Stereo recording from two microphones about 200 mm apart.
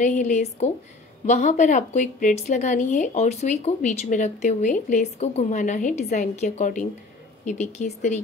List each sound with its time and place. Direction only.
0.0 s a woman's voice: 35° left (ahead or behind)